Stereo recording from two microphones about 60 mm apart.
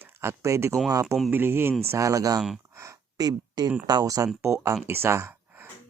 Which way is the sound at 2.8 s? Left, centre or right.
Right.